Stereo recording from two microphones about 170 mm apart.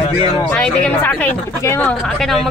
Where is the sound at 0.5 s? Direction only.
5° left (ahead or behind).